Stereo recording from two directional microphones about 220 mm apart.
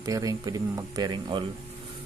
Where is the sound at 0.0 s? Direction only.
15° right (ahead or behind).